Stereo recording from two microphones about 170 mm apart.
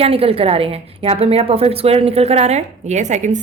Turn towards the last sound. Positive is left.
turn(degrees=-45)  # may be behind; listen again after turning